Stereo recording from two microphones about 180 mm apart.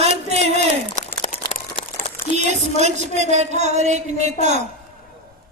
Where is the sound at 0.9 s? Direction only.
40° left (ahead or behind).